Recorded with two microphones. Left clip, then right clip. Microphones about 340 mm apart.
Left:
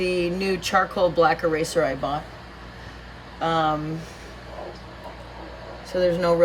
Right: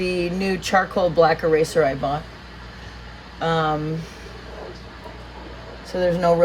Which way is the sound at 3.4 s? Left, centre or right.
Right.